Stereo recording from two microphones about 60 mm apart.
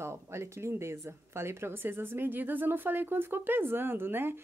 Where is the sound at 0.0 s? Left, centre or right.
Right.